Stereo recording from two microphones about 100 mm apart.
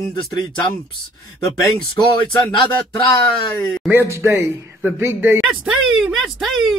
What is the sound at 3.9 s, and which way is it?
Speech, 25° right (ahead or behind).